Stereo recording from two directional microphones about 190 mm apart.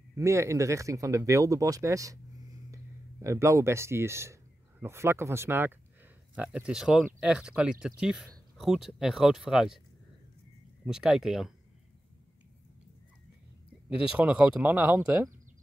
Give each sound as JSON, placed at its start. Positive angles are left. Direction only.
{"t": 0.1, "sound": "speech", "side_deg": -15}
{"t": 10.9, "sound": "speech", "side_deg": -5}
{"t": 13.8, "sound": "speech", "side_deg": -5}